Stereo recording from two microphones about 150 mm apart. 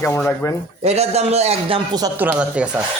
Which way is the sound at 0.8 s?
45° right (ahead or behind).